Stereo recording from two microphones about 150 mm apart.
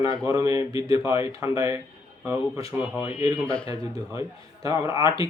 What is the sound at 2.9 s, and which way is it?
Speech, 40° left (ahead or behind).